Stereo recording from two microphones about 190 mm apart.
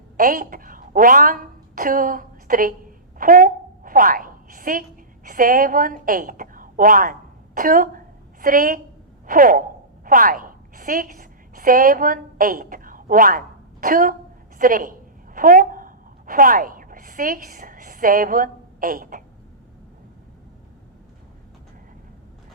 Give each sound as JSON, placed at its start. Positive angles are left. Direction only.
{"t": 0.2, "sound": "a woman's voice", "side_deg": -45}